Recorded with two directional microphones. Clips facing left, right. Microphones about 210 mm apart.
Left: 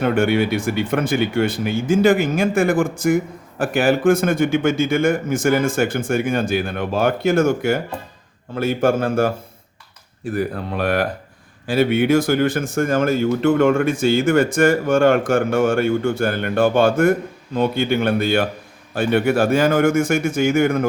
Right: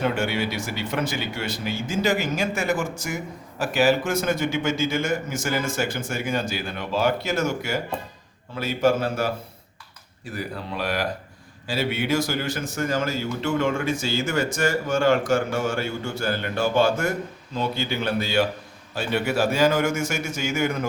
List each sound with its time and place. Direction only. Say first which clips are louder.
0.0 s a man's voice: left 7 dB; 55° left (ahead or behind)